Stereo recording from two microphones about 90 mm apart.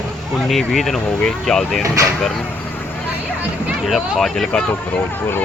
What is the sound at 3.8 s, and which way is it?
Speech, centre (ahead or behind).